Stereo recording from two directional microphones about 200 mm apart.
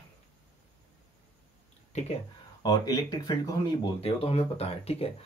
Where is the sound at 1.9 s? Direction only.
35° left (ahead or behind).